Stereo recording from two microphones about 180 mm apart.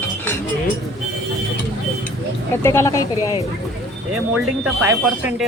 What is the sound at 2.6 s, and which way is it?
Speech, 15° left (ahead or behind).